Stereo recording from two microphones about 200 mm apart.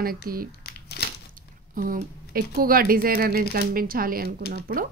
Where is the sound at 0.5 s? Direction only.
55° left (ahead or behind).